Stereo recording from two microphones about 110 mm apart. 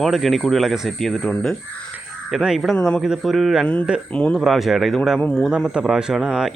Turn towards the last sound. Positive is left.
turn(degrees=-5)  # may be behind; listen again after turning